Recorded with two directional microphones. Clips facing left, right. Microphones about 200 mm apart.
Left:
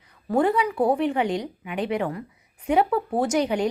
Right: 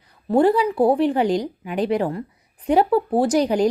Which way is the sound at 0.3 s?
30° right (ahead or behind).